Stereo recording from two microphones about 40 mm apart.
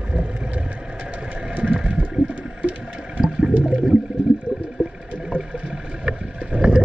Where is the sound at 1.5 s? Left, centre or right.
Right.